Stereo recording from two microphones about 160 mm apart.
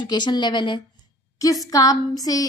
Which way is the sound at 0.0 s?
25° left (ahead or behind).